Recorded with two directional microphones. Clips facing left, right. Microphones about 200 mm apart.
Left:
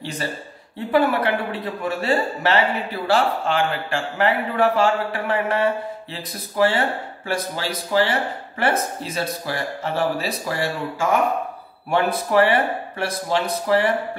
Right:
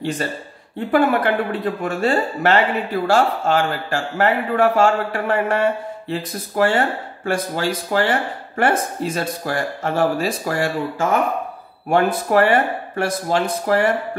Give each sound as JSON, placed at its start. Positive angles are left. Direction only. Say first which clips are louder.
{"t": 0.9, "sound": "a man's voice", "louder": "right 2 dB", "side_deg": -50}